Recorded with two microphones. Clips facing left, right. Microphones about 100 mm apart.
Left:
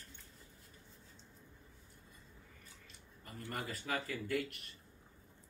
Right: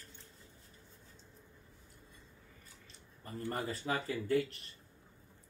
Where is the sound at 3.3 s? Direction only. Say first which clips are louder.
Right 5 dB; 35° right (ahead or behind).